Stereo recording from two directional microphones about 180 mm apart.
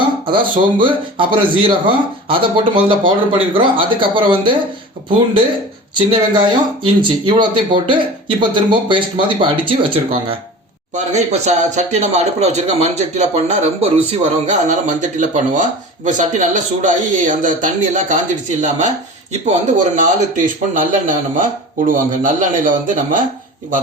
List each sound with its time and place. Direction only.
0.3 s speech: 25° right (ahead or behind)
5.9 s speech: 25° right (ahead or behind)
10.9 s speech: 40° right (ahead or behind)